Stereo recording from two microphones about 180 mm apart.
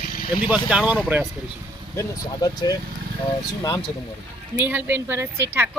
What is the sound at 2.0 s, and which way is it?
Speech, 20° left (ahead or behind).